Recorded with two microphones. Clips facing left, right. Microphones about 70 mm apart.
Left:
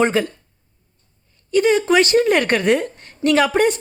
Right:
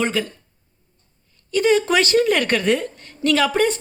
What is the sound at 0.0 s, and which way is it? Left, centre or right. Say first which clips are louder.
Speech: left 5 dB; left.